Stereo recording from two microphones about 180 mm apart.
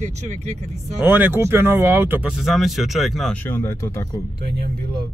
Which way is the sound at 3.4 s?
15° left (ahead or behind).